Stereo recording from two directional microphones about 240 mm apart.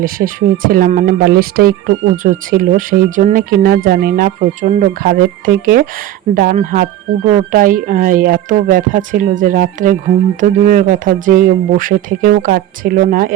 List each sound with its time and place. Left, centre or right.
0.0 s speech: right